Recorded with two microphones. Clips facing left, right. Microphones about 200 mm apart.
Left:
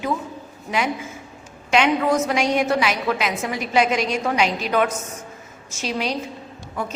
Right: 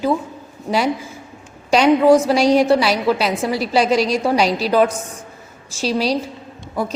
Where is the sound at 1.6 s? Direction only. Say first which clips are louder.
Right 7 dB; 35° right (ahead or behind).